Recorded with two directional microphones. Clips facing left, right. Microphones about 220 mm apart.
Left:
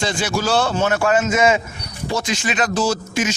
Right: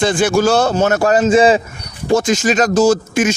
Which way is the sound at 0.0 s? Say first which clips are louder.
Right 8 dB; 50° right (ahead or behind).